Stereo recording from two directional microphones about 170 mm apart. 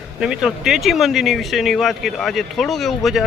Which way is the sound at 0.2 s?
5° right (ahead or behind).